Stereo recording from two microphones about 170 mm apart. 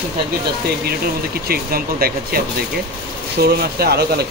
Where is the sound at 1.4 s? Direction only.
60° right (ahead or behind).